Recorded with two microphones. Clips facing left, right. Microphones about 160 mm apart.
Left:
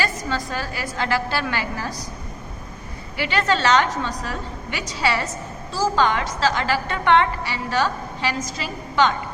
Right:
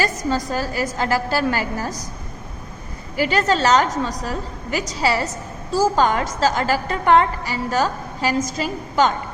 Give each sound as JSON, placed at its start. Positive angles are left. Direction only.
{"t": 0.0, "sound": "a woman's voice", "side_deg": -40}
{"t": 3.2, "sound": "a woman's voice", "side_deg": -40}